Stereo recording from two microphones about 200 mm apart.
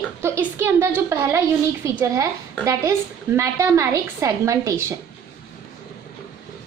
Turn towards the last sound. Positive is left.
turn(degrees=-15)  # may be behind; listen again after turning